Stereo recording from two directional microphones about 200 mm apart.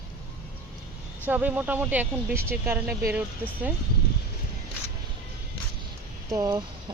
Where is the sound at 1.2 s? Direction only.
10° right (ahead or behind).